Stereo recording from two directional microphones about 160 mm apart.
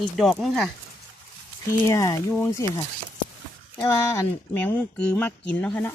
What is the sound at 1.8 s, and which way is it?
Speech, 20° left (ahead or behind).